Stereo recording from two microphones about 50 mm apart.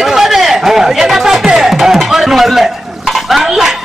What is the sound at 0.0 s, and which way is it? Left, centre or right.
Music, centre.